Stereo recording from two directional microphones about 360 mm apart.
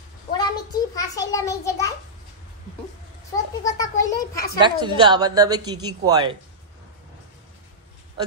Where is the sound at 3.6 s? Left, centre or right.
Centre.